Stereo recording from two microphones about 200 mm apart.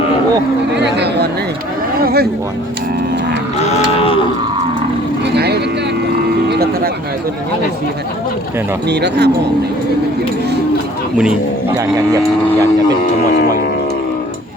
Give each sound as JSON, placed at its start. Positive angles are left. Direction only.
{"t": 0.8, "sound": "a sound", "side_deg": -55}
{"t": 3.6, "sound": "cattle", "side_deg": 30}
{"t": 6.5, "sound": "music", "side_deg": -50}
{"t": 8.9, "sound": "speech", "side_deg": -55}